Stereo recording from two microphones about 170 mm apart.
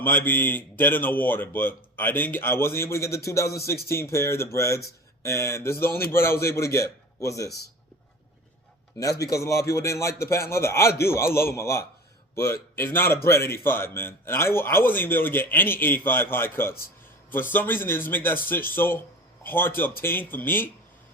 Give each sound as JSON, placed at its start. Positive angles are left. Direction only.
{"t": 0.0, "sound": "speech", "side_deg": 10}
{"t": 3.4, "sound": "speech", "side_deg": 70}
{"t": 4.1, "sound": "speech", "side_deg": 15}
{"t": 9.2, "sound": "speech", "side_deg": 15}